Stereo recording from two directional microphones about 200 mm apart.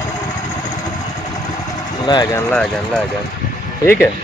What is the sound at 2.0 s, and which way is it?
Speech, 20° left (ahead or behind).